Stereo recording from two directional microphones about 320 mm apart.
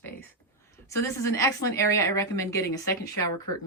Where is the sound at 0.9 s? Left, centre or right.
Centre.